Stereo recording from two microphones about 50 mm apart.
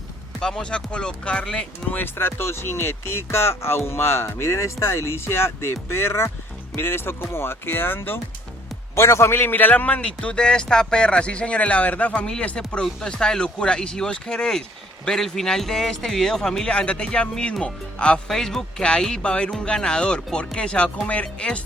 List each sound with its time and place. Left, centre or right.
0.3 s speech: centre
2.1 s speech: left
9.0 s a man's voice: left
9.4 s a man's voice: left
10.0 s speech: centre
12.2 s speech: centre
16.6 s speech: left
18.3 s speech: centre